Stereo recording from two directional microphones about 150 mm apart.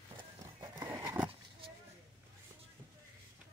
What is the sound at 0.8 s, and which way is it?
Horse, 15° right (ahead or behind).